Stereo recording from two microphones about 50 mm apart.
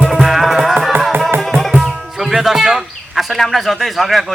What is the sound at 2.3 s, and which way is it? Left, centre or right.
Music, centre.